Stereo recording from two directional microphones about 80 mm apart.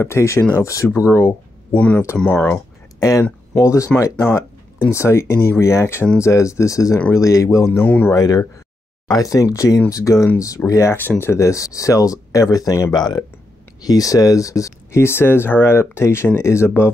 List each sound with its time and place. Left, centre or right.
0.0 s speech: left
1.7 s speech: centre
3.0 s speech: left
7.8 s speech: left
8.1 s speech: left
12.9 s speech: left